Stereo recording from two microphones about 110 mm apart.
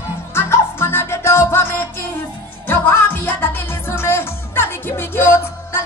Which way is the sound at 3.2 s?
20° left (ahead or behind).